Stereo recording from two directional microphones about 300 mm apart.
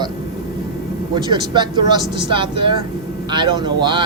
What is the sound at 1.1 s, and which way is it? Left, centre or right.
Speech, centre.